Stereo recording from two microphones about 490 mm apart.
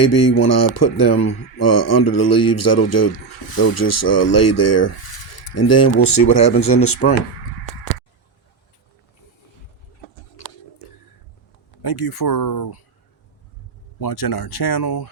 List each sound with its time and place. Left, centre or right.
0.0 s a man's voice: left
11.8 s speech: left
14.0 s speech: left